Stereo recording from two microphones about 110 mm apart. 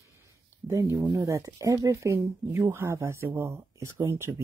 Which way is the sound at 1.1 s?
30° right (ahead or behind).